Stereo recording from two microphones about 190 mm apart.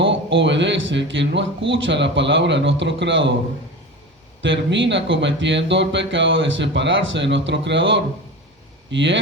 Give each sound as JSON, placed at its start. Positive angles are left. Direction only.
{"t": 0.1, "sound": "a man's voice", "side_deg": -75}
{"t": 4.4, "sound": "a man's voice", "side_deg": -70}